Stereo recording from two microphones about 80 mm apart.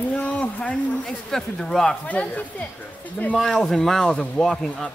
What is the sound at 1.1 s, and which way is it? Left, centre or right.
Speech, centre.